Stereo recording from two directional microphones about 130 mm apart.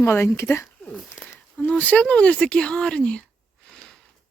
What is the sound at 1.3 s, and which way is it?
Speech, 10° left (ahead or behind).